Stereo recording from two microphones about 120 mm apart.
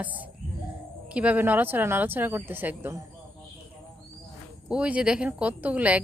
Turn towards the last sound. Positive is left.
turn(degrees=-10)  # may be behind; listen again after turning